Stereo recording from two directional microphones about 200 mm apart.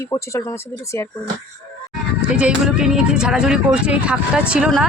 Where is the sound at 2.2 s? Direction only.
5° right (ahead or behind).